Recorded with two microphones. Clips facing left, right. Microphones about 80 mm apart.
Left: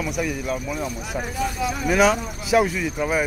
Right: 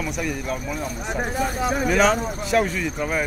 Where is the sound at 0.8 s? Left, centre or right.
Right.